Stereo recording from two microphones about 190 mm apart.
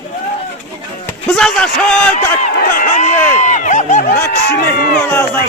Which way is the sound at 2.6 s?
50° left (ahead or behind).